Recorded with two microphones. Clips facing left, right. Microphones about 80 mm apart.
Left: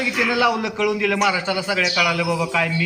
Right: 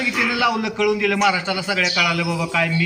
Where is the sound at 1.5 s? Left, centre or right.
Left.